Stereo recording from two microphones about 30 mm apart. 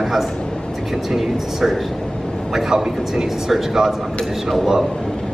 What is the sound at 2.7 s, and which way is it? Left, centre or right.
Speech, right.